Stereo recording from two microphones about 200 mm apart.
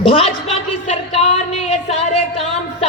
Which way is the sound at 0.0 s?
25° left (ahead or behind).